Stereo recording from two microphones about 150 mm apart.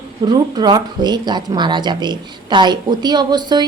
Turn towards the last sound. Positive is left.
turn(degrees=-30)  # may be behind; listen again after turning